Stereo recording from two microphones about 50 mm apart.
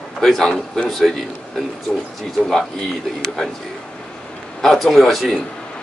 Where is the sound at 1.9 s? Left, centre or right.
Left.